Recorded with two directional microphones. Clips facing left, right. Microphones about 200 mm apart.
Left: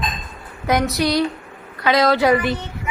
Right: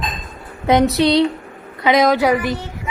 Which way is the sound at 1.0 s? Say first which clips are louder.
Right 5 dB; 25° right (ahead or behind).